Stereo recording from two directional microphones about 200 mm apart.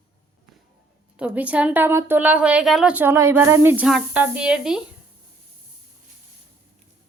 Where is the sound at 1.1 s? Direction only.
5° right (ahead or behind).